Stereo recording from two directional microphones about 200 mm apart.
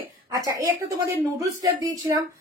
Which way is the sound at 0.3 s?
15° right (ahead or behind).